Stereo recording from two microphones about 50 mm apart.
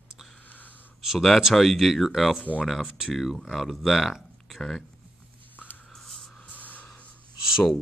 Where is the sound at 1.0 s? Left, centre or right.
Centre.